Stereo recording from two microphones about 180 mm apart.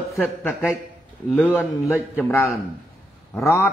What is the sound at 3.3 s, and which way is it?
Speech, 15° left (ahead or behind).